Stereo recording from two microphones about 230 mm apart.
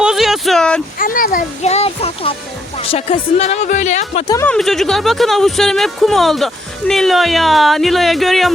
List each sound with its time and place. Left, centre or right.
0.0 s a sound: centre
0.9 s a child's voice: left
4.4 s speech: centre